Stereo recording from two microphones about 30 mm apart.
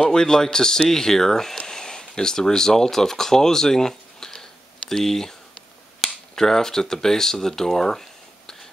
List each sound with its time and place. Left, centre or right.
0.1 s speech: left
6.3 s speech: centre